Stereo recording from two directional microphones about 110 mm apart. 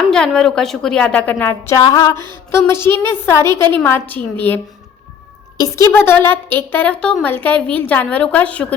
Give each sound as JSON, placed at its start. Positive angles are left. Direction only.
{"t": 0.1, "sound": "a woman's voice", "side_deg": 5}
{"t": 1.7, "sound": "a sound", "side_deg": 35}
{"t": 2.5, "sound": "a woman's voice", "side_deg": 25}
{"t": 5.5, "sound": "a woman's voice", "side_deg": 30}